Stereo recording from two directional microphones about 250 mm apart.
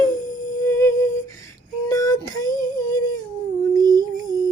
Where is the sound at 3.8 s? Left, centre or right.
Centre.